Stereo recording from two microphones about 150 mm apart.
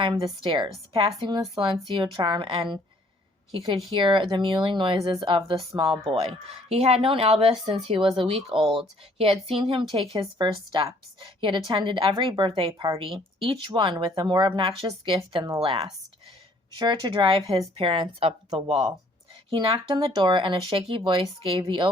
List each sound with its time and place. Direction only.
0.0 s a woman's voice: 35° right (ahead or behind)
3.8 s a woman's voice: 35° right (ahead or behind)